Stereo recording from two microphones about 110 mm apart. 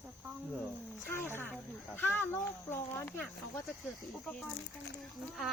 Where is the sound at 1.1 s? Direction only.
20° left (ahead or behind).